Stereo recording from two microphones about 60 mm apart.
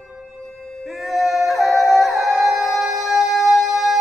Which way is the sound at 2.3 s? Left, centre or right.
Right.